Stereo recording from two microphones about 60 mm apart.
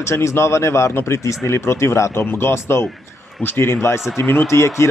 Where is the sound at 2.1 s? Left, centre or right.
Left.